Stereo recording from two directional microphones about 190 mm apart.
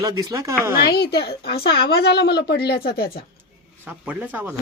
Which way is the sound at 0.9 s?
60° left (ahead or behind).